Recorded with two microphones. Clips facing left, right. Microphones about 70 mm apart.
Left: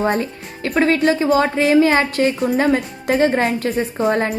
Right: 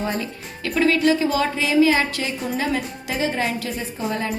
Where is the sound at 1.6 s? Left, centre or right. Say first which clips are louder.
Left 1 dB; left.